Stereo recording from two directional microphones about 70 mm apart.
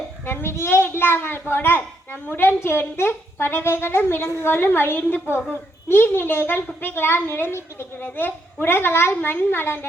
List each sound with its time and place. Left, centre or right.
0.3 s a child's voice: left